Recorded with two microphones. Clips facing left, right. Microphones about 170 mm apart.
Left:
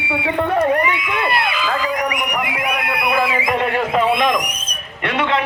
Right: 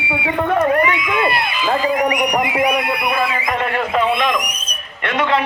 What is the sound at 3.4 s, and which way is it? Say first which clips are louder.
Speech: left 1 dB; 10° left (ahead or behind).